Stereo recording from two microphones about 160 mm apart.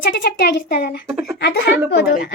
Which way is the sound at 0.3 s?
90° left.